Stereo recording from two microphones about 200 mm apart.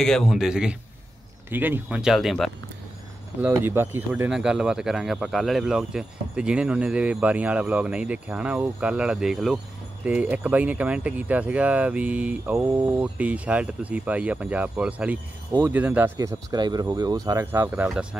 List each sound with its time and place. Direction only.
0.0 s speech: centre (ahead or behind)
3.3 s speech: 10° right (ahead or behind)